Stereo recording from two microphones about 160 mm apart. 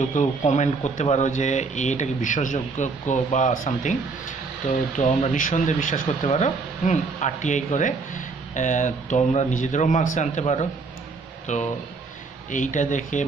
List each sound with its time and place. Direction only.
0.1 s speech: 50° left (ahead or behind)
4.9 s speech: 50° left (ahead or behind)